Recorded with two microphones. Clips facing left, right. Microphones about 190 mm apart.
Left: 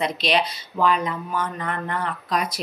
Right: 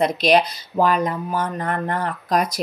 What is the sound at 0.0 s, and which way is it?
A woman's voice, 45° right (ahead or behind).